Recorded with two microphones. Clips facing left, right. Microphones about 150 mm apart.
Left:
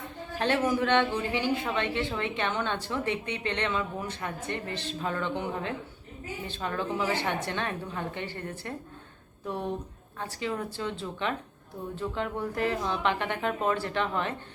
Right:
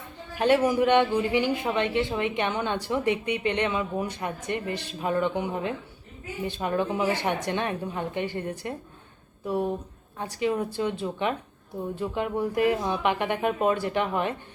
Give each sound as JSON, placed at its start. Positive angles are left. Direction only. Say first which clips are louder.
{"t": 0.3, "sound": "speech", "louder": "right 5 dB", "side_deg": -10}
{"t": 10.2, "sound": "speech", "louder": "right 6 dB", "side_deg": -15}